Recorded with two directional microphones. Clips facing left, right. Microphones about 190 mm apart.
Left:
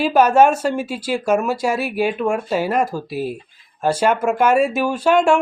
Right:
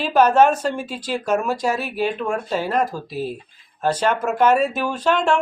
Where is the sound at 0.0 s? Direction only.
10° left (ahead or behind).